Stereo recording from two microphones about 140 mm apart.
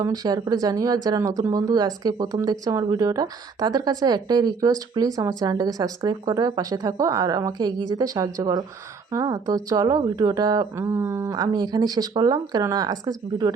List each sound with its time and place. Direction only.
0.0 s speech: 25° right (ahead or behind)